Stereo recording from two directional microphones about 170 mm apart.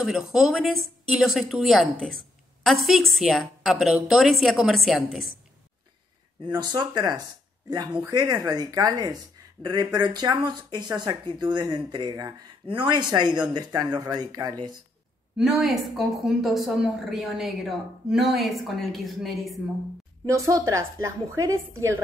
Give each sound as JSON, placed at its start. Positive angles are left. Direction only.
{"t": 0.0, "sound": "a woman's voice", "side_deg": 0}
{"t": 6.4, "sound": "speech", "side_deg": -25}
{"t": 15.3, "sound": "a woman's voice", "side_deg": 0}
{"t": 20.2, "sound": "a woman's voice", "side_deg": -20}